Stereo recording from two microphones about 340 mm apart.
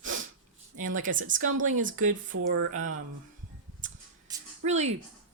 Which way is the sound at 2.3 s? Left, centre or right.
Right.